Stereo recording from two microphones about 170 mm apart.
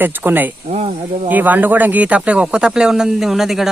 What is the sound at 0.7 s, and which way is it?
Speech, 35° right (ahead or behind).